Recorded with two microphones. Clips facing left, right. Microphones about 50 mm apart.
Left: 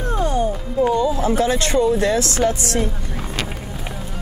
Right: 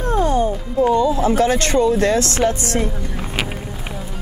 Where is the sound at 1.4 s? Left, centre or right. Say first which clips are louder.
Right 1 dB; right.